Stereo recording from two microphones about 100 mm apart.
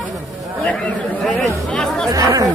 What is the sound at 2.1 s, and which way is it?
Speech, 40° right (ahead or behind).